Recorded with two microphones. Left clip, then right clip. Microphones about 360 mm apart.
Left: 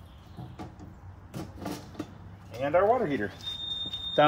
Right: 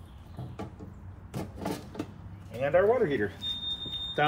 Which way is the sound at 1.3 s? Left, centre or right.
Centre.